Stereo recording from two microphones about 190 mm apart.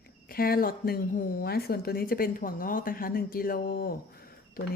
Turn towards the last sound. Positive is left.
turn(degrees=50)  # may be behind; listen again after turning